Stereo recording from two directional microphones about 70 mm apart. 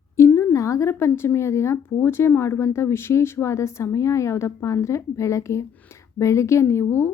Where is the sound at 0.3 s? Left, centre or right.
Left.